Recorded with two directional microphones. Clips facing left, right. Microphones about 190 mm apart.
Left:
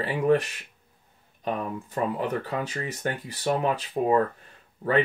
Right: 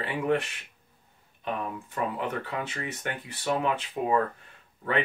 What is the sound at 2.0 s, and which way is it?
Speech, 35° left (ahead or behind).